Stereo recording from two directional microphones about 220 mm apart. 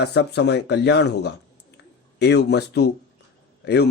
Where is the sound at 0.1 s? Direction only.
50° left (ahead or behind).